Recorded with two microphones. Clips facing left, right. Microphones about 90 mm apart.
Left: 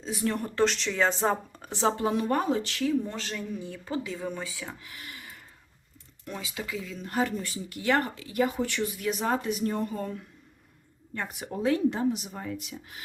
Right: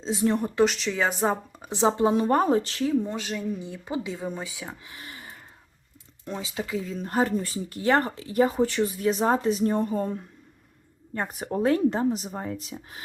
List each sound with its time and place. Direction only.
0.0 s a woman's voice: 25° right (ahead or behind)
0.6 s a woman's voice: 5° right (ahead or behind); by 3.1 s 30° right (ahead or behind)
3.1 s a woman's voice: 15° right (ahead or behind); by 13.0 s 35° right (ahead or behind)